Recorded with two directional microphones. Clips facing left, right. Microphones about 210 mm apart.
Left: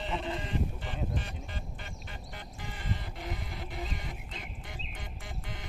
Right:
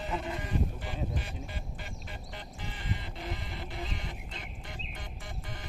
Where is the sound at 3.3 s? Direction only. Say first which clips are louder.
Left 1 dB; centre (ahead or behind).